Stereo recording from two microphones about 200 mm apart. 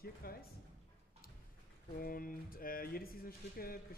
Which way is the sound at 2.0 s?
45° left (ahead or behind).